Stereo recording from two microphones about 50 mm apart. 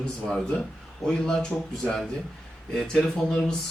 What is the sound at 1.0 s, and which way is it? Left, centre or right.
A man's voice, centre.